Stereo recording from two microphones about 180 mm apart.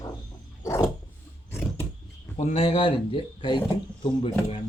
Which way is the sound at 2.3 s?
35° left (ahead or behind).